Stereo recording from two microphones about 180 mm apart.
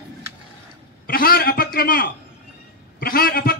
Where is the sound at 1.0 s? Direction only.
55° left (ahead or behind).